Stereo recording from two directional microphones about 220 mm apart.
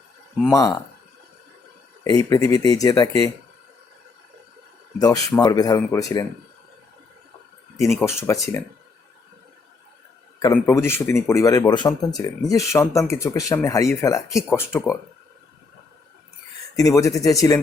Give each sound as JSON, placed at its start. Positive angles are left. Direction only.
{"t": 0.5, "sound": "speech", "side_deg": 15}
{"t": 2.0, "sound": "speech", "side_deg": 15}
{"t": 4.9, "sound": "speech", "side_deg": 15}
{"t": 7.8, "sound": "speech", "side_deg": 10}
{"t": 10.4, "sound": "speech", "side_deg": 10}
{"t": 16.7, "sound": "speech", "side_deg": 15}